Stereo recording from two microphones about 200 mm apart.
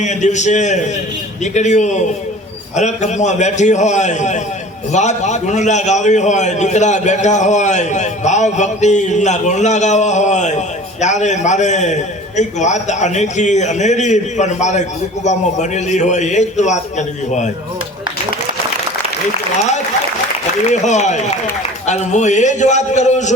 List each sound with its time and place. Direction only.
0.0 s a man's voice: 35° left (ahead or behind)
20.7 s a man's voice: 35° left (ahead or behind)